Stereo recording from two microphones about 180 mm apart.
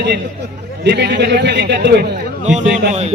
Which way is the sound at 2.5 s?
40° right (ahead or behind).